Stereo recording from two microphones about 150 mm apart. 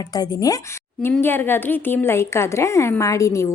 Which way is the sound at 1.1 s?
15° left (ahead or behind).